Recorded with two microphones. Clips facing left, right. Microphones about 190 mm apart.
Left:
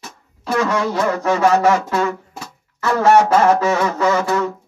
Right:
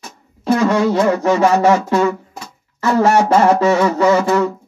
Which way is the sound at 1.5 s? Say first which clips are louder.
Right 2 dB; 30° right (ahead or behind).